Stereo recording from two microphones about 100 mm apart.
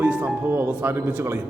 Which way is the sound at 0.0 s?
20° right (ahead or behind).